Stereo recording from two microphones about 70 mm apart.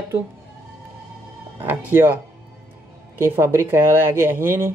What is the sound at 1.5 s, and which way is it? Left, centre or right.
Speech, right.